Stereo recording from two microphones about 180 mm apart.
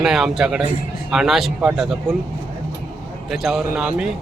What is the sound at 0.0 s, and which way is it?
Speech, centre (ahead or behind).